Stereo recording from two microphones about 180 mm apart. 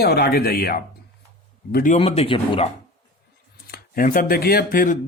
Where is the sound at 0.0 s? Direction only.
60° left (ahead or behind).